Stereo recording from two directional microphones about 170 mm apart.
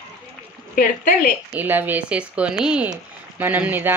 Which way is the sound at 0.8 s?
50° left (ahead or behind).